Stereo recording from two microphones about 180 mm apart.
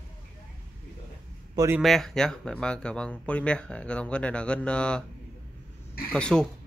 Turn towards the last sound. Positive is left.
turn(degrees=5)  # may be behind; listen again after turning